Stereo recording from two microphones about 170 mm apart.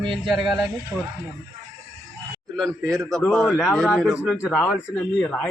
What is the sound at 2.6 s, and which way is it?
A man's voice, centre (ahead or behind).